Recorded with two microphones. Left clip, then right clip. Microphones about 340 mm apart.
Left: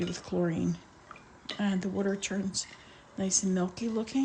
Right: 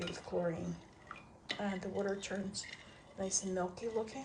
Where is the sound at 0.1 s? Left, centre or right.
Left.